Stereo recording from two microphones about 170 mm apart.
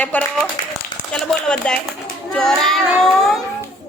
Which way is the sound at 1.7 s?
5° left (ahead or behind).